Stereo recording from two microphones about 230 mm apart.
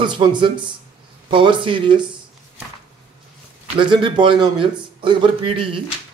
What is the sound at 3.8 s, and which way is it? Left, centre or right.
Speech, right.